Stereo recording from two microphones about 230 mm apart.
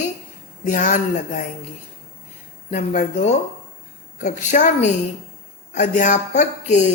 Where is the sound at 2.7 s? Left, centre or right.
Left.